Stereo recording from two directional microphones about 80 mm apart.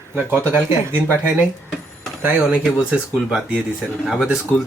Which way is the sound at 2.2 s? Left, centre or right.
Centre.